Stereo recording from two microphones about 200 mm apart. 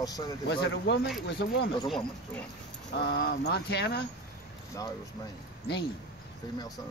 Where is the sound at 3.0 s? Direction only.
55° left (ahead or behind).